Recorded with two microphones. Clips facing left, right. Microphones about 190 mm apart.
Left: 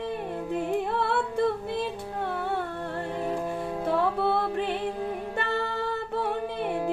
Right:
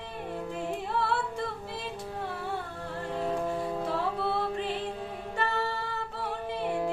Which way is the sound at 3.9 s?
60° left (ahead or behind).